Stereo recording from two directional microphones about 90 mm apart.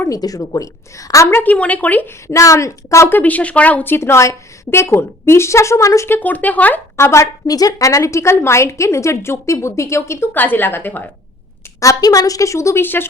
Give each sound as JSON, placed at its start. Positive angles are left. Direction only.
{"t": 0.1, "sound": "a woman's voice", "side_deg": 40}
{"t": 1.3, "sound": "a woman's voice", "side_deg": 20}
{"t": 2.2, "sound": "a woman's voice", "side_deg": 35}
{"t": 3.2, "sound": "a woman's voice", "side_deg": 15}
{"t": 6.1, "sound": "a woman's voice", "side_deg": 20}
{"t": 6.9, "sound": "a woman's voice", "side_deg": 30}
{"t": 11.8, "sound": "a woman's voice", "side_deg": 40}